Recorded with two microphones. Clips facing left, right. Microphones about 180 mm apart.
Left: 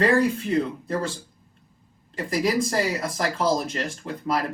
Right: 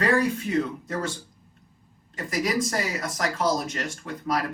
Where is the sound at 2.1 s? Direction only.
30° left (ahead or behind).